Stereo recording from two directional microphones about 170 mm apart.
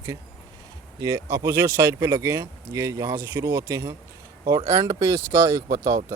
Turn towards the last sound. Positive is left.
turn(degrees=-20)  # may be behind; listen again after turning